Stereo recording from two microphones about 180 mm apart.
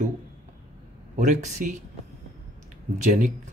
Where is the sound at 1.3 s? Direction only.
40° right (ahead or behind).